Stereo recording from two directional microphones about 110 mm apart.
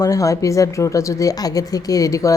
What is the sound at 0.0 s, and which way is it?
Speech, 30° left (ahead or behind).